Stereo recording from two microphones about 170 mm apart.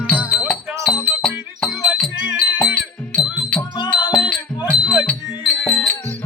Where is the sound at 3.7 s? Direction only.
25° left (ahead or behind).